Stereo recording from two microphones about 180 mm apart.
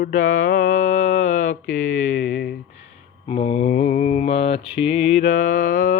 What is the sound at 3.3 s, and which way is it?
Mantra, 30° left (ahead or behind).